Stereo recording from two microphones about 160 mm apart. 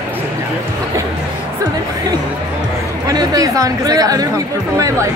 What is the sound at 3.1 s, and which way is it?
A woman's voice, 20° right (ahead or behind).